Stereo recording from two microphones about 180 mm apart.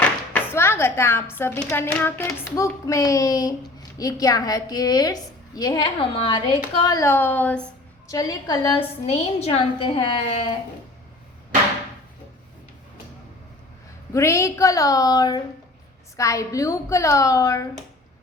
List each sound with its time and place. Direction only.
0.3 s a woman's voice: 15° left (ahead or behind)
8.0 s a woman's voice: 20° left (ahead or behind)
9.0 s a woman's voice: 35° left (ahead or behind)
14.1 s a woman's voice: 15° left (ahead or behind)